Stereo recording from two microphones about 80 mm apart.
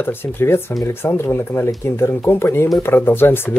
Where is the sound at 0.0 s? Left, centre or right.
Left.